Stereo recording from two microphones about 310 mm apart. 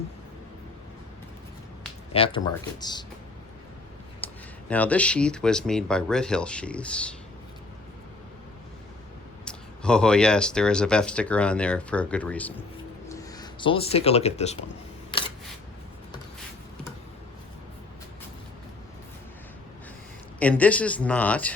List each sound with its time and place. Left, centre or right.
2.1 s speech: centre
4.2 s a sound: centre
4.7 s speech: centre
9.4 s speech: centre; by 14.6 s left
20.4 s speech: centre